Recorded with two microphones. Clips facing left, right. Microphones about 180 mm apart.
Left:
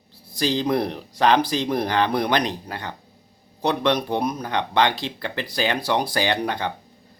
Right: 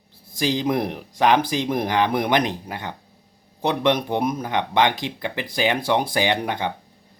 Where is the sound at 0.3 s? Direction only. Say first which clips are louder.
Even; 15° right (ahead or behind).